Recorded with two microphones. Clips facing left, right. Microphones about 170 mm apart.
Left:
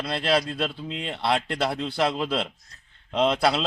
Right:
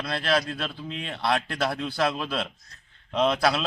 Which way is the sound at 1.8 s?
25° left (ahead or behind).